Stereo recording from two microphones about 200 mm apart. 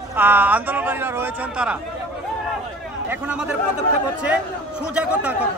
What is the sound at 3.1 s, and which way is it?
Speech, 5° right (ahead or behind).